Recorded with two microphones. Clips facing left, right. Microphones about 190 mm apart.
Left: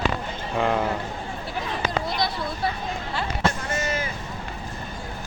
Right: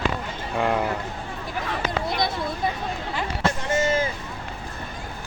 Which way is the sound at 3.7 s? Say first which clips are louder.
Right 5 dB; 25° right (ahead or behind).